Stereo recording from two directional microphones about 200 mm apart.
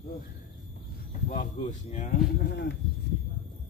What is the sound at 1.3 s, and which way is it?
Speech, 40° left (ahead or behind).